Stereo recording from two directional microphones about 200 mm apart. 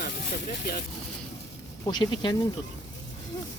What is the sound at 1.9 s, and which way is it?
Speech, 20° left (ahead or behind).